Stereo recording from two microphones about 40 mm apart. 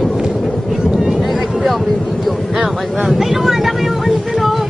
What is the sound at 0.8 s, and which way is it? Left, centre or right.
Vehicle, centre.